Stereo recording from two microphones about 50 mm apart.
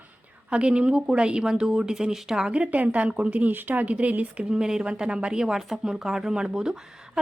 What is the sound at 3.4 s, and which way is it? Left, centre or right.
Speech, right.